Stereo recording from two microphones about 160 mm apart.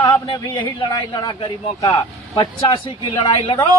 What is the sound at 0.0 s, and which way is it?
A man's voice, 30° left (ahead or behind).